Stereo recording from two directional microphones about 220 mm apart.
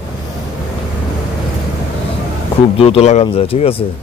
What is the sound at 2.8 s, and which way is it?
Speech, 25° left (ahead or behind).